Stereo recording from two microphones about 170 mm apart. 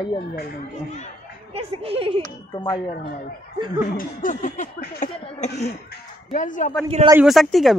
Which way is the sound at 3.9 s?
50° left (ahead or behind).